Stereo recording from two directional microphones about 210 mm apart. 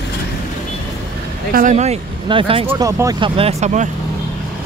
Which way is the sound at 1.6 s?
35° right (ahead or behind).